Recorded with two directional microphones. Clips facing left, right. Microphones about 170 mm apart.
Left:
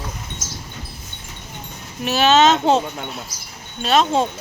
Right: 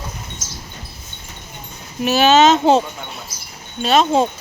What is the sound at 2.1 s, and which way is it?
Speech, 5° right (ahead or behind).